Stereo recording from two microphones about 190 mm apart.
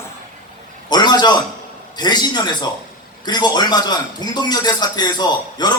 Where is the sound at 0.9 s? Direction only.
20° left (ahead or behind).